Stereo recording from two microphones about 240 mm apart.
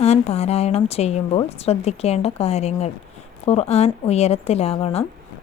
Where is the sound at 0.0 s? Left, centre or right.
Left.